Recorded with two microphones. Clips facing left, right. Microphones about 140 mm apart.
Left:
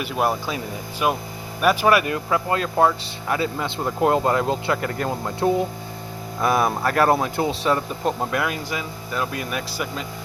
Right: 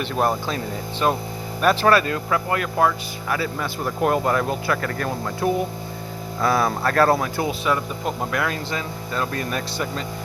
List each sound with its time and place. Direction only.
0.0 s speech: 5° left (ahead or behind)